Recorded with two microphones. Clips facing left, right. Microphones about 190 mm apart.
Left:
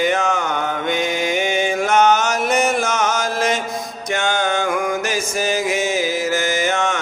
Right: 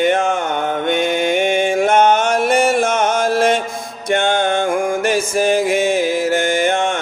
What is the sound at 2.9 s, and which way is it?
Chant, 55° right (ahead or behind).